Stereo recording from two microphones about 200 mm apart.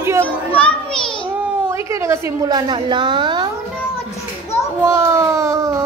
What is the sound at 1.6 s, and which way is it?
A woman's voice, 15° right (ahead or behind).